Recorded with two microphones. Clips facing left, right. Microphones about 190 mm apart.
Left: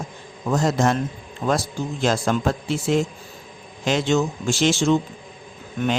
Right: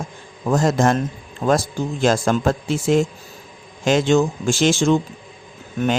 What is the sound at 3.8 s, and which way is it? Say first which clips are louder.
Speech: right 4 dB; 50° right (ahead or behind).